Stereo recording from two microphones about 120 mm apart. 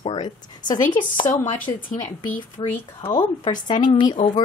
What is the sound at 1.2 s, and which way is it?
Speech, 90° left.